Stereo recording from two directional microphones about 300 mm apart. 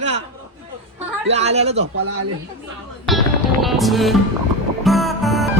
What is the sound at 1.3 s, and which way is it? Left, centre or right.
Speech, right.